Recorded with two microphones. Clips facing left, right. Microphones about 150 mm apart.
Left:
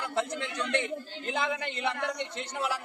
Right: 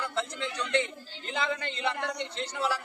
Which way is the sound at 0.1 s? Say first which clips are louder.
Left 2 dB; 55° left (ahead or behind).